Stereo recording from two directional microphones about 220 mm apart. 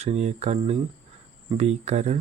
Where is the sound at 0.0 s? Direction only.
30° right (ahead or behind).